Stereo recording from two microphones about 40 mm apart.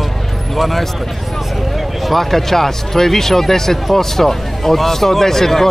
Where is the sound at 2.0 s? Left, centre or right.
Centre.